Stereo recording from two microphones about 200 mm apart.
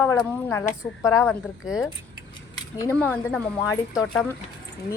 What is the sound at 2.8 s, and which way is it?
A woman's voice, 10° left (ahead or behind).